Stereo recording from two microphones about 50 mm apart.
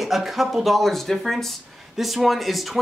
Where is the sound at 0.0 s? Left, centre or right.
Centre.